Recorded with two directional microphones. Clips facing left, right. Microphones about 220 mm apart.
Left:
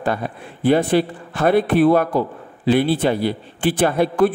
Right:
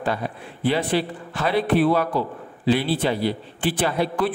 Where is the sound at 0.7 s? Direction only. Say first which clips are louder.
Left 6 dB; 50° left (ahead or behind).